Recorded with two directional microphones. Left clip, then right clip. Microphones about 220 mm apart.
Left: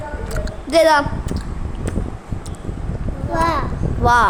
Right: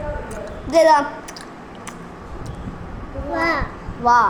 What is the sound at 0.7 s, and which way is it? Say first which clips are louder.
Speech: even; 20° left (ahead or behind).